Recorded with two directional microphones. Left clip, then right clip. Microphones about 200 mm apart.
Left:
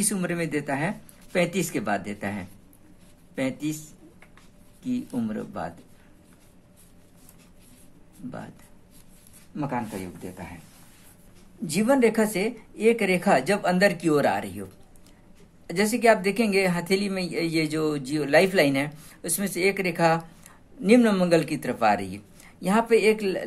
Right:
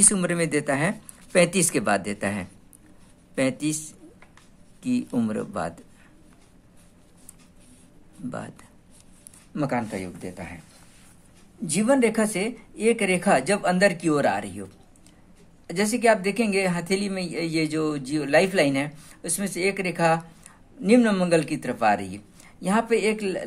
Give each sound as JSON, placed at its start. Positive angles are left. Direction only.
{"t": 0.0, "sound": "speech", "side_deg": -25}
{"t": 9.6, "sound": "speech", "side_deg": -35}
{"t": 11.6, "sound": "a woman's voice", "side_deg": -10}